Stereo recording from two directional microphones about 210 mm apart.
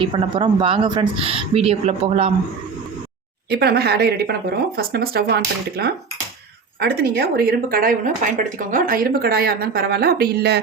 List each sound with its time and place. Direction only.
0.0 s speech: 25° right (ahead or behind)
3.5 s speech: 50° right (ahead or behind)